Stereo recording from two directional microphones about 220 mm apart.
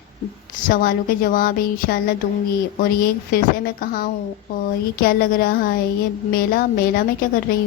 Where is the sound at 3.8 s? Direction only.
40° left (ahead or behind).